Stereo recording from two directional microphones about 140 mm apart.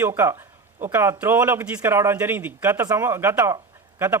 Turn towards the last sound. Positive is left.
turn(degrees=-15)  # may be behind; listen again after turning